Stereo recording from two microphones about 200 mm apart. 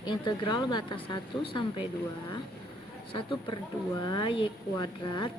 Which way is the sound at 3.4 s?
25° left (ahead or behind).